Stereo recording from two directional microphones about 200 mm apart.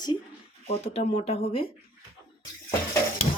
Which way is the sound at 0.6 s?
30° left (ahead or behind).